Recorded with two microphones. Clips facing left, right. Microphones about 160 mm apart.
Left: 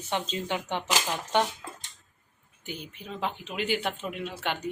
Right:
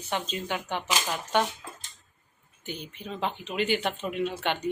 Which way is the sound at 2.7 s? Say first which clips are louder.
Right 2 dB; 5° left (ahead or behind).